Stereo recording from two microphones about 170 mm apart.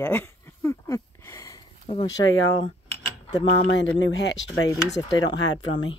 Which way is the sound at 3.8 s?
90° left.